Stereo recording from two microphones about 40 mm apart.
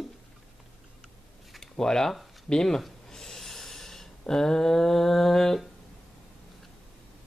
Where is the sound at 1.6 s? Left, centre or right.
Centre.